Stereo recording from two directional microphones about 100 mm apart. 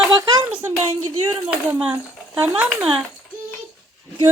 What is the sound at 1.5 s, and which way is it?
Speech, 15° right (ahead or behind).